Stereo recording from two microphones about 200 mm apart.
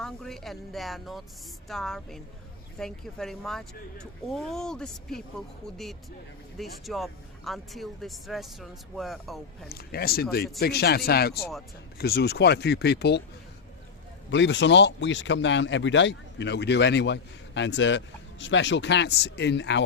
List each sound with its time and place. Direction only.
0.0 s speech: centre (ahead or behind)
9.6 s speech: 50° left (ahead or behind)
14.3 s speech: 65° left (ahead or behind)